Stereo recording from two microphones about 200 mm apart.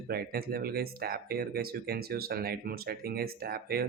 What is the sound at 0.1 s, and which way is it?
Speech, 50° right (ahead or behind).